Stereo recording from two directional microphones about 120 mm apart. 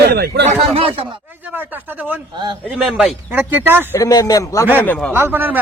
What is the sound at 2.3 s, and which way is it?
Speech, 40° right (ahead or behind).